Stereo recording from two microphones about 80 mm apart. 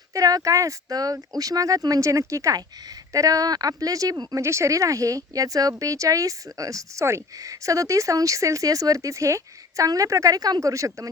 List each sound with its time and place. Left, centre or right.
0.1 s speech: right